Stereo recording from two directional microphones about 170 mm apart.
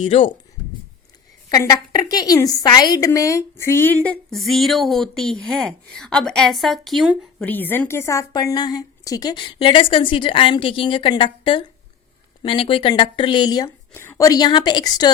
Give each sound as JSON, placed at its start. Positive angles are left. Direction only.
{"t": 0.0, "sound": "speech", "side_deg": 30}
{"t": 1.5, "sound": "a woman's voice", "side_deg": 20}
{"t": 7.4, "sound": "a woman's voice", "side_deg": 10}